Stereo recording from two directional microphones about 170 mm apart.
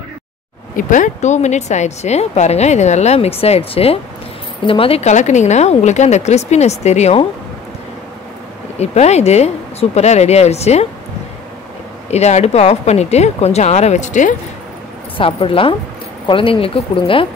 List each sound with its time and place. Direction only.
0.7 s speech: 50° left (ahead or behind)
8.7 s speech: 40° left (ahead or behind)
12.1 s speech: 40° left (ahead or behind)
15.1 s speech: 30° left (ahead or behind)